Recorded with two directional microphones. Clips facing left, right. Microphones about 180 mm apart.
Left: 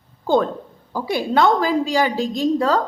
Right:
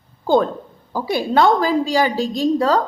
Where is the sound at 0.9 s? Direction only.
35° right (ahead or behind).